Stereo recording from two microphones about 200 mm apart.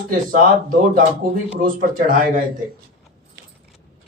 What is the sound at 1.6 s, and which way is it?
Speech, 45° right (ahead or behind).